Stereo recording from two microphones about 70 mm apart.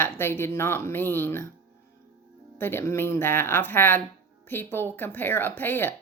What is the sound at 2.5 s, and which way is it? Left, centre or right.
Speech, left.